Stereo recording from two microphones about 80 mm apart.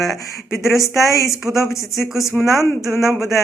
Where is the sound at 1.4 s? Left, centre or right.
Right.